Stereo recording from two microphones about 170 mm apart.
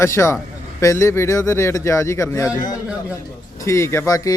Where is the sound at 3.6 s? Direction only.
15° left (ahead or behind).